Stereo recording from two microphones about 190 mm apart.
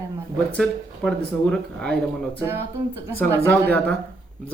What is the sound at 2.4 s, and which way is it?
Speech, 15° right (ahead or behind).